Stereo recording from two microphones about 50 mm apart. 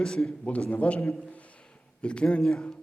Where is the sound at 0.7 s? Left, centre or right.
Left.